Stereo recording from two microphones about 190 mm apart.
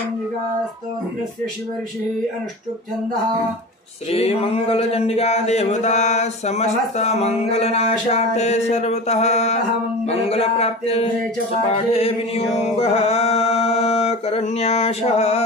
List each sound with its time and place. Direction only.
4.1 s speech: 30° left (ahead or behind)
11.7 s music: 30° left (ahead or behind)